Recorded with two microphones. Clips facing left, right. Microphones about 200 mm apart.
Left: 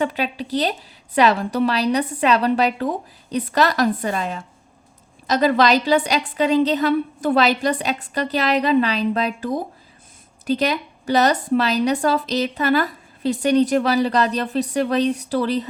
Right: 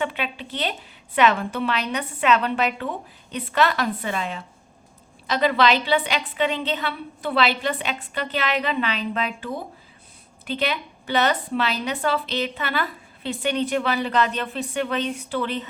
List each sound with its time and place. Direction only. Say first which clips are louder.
0.0 s a woman's voice: left 5 dB; 40° left (ahead or behind)